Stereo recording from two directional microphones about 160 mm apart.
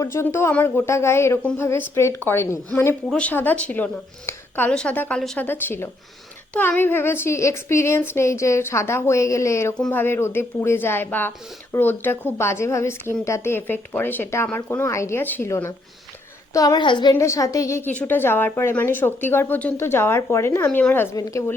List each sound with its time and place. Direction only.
0.0 s a woman's voice: 15° left (ahead or behind)